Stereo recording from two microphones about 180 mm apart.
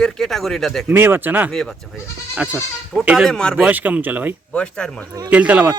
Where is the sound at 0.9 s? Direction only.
10° right (ahead or behind).